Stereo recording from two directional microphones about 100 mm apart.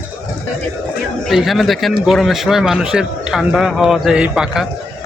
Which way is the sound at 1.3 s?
Centre (ahead or behind).